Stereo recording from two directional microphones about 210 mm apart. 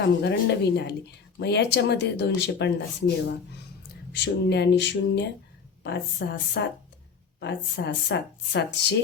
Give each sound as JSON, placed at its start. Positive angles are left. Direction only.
{"t": 0.0, "sound": "a woman's voice", "side_deg": 55}
{"t": 4.1, "sound": "a sound", "side_deg": 55}
{"t": 5.8, "sound": "a woman's voice", "side_deg": 55}